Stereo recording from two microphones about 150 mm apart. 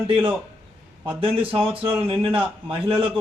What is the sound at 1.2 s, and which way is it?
A man's voice, 35° right (ahead or behind).